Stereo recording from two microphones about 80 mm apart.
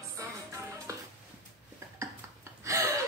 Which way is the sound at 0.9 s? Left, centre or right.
Right.